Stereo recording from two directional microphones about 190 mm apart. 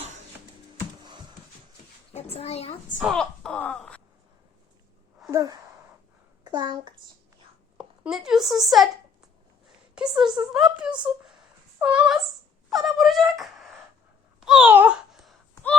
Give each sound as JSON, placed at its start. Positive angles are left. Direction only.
{"t": 2.1, "sound": "a child's voice", "side_deg": 30}
{"t": 3.0, "sound": "speech", "side_deg": 0}
{"t": 5.3, "sound": "a child's voice", "side_deg": -15}
{"t": 7.8, "sound": "speech", "side_deg": -5}
{"t": 10.2, "sound": "speech", "side_deg": -5}
{"t": 14.4, "sound": "babbling", "side_deg": -5}